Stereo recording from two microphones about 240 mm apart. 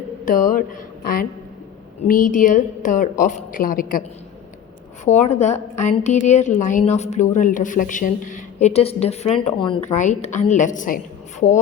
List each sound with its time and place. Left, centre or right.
0.3 s a woman's voice: left
5.0 s a woman's voice: left